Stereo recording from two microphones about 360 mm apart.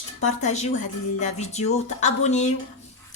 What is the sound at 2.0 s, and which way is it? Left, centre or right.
Speech, centre.